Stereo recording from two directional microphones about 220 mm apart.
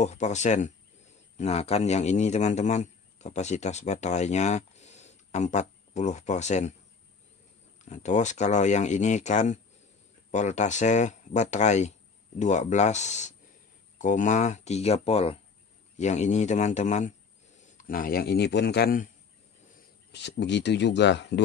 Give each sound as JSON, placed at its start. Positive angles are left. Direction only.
{"t": 0.0, "sound": "speech", "side_deg": 30}
{"t": 7.8, "sound": "speech", "side_deg": 30}
{"t": 20.1, "sound": "speech", "side_deg": 50}